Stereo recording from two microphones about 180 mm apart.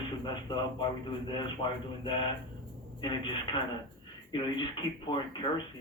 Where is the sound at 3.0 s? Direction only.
25° left (ahead or behind).